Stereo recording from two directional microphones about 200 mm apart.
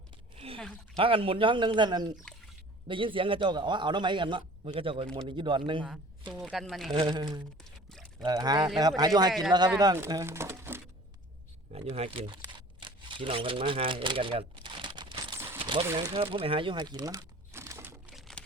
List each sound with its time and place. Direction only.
0.3 s a sound: 30° right (ahead or behind)
0.9 s a man's voice: 25° right (ahead or behind)
6.3 s speech: centre (ahead or behind)
6.9 s a man's voice: 20° right (ahead or behind)
7.9 s a sound: 5° left (ahead or behind)
8.2 s a man's voice: 20° right (ahead or behind)
11.7 s speech: 30° right (ahead or behind)
15.5 s a sound: 25° right (ahead or behind)
16.0 s crumpling: 25° right (ahead or behind); by 18.4 s centre (ahead or behind)